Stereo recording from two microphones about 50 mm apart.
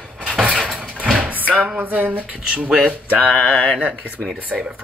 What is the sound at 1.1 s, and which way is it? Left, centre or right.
Speech, right.